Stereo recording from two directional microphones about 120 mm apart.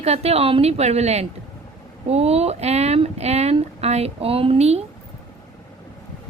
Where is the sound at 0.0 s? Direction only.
60° right (ahead or behind).